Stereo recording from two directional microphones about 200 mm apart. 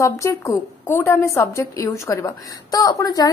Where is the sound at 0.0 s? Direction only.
15° left (ahead or behind).